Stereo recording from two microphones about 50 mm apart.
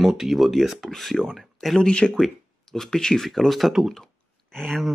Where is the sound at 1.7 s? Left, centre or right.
Centre.